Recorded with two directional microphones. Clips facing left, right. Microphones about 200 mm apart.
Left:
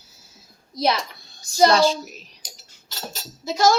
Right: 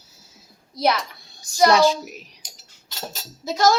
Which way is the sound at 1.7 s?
15° right (ahead or behind).